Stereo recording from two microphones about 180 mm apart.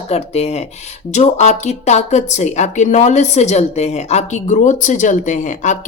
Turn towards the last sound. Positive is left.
turn(degrees=45)  # may be behind; listen again after turning